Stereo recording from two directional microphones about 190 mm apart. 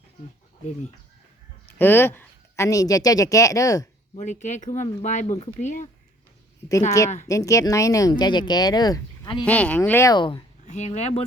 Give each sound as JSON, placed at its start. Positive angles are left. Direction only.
{"t": 1.6, "sound": "speech", "side_deg": 10}
{"t": 4.1, "sound": "speech", "side_deg": 40}
{"t": 7.3, "sound": "speech", "side_deg": 15}
{"t": 9.4, "sound": "speech", "side_deg": 5}
{"t": 10.7, "sound": "speech", "side_deg": 35}